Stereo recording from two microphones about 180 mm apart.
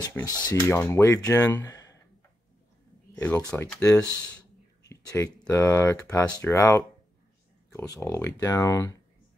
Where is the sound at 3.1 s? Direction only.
15° left (ahead or behind).